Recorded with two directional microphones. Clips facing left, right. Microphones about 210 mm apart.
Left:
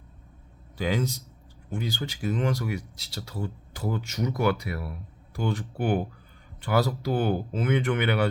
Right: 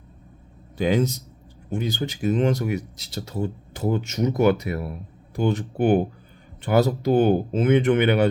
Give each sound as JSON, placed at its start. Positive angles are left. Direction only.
{"t": 0.8, "sound": "speech", "side_deg": -20}